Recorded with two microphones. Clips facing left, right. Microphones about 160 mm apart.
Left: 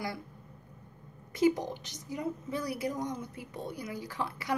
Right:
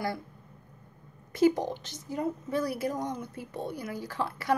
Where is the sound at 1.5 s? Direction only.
20° right (ahead or behind).